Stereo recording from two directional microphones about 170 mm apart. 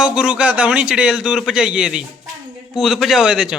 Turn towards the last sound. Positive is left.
turn(degrees=-5)  # may be behind; listen again after turning